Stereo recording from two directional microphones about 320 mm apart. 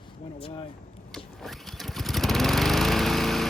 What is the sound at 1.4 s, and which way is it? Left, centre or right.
Lawn mower, centre.